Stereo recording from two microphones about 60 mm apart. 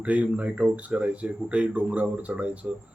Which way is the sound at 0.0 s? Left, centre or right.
Right.